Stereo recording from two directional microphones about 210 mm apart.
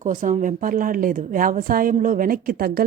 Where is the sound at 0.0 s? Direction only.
40° right (ahead or behind).